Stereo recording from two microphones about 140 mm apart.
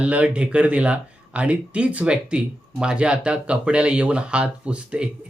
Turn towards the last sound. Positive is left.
turn(degrees=-5)  # may be behind; listen again after turning